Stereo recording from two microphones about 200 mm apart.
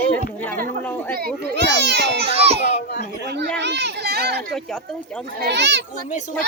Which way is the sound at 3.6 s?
60° right (ahead or behind).